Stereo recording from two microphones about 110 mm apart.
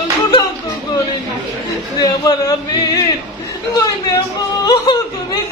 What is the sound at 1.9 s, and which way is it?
Speech, 35° left (ahead or behind).